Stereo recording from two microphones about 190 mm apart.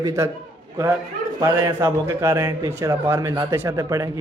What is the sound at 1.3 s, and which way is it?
A man's voice, 15° right (ahead or behind).